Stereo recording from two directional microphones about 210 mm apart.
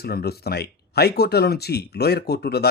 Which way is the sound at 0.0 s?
50° left (ahead or behind).